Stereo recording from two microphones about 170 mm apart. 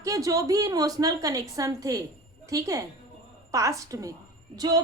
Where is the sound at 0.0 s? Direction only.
20° right (ahead or behind).